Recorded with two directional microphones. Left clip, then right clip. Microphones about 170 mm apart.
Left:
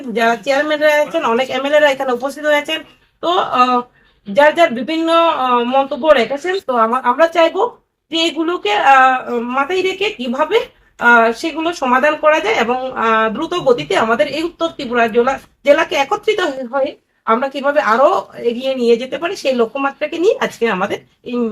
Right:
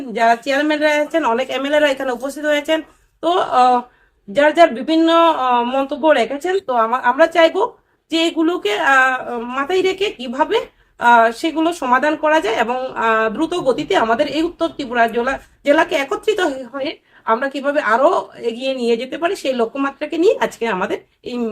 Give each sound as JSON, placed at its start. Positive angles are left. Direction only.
{"t": 0.1, "sound": "speech", "side_deg": -25}